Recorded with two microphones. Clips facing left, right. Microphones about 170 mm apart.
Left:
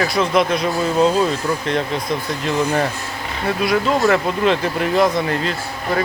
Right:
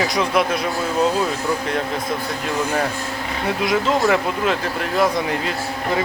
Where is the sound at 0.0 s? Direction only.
15° right (ahead or behind).